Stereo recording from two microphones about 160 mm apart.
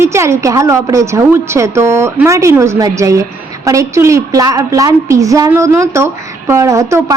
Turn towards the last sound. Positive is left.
turn(degrees=-20)  # may be behind; listen again after turning